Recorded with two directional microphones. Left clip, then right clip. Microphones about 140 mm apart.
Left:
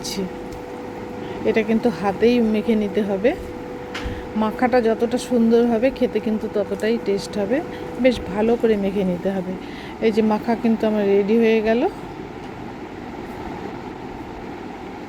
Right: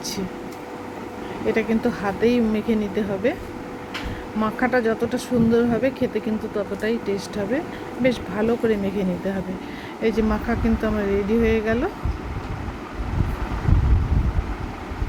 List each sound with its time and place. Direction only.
1.5 s speech: 25° left (ahead or behind)
4.4 s speech: 25° left (ahead or behind)